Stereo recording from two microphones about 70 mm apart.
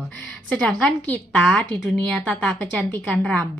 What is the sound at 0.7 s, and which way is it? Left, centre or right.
Speech, left.